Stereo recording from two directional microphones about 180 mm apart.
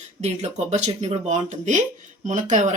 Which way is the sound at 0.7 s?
35° right (ahead or behind).